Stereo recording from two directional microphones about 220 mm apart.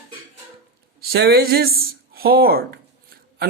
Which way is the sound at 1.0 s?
45° right (ahead or behind).